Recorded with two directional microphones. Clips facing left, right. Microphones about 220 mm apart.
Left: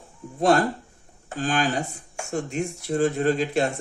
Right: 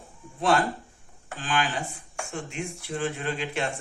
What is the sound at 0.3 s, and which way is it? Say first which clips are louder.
Speech: left 4 dB; 45° left (ahead or behind).